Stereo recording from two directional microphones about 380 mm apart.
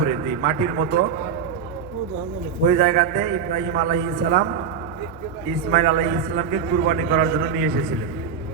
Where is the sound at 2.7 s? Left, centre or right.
Centre.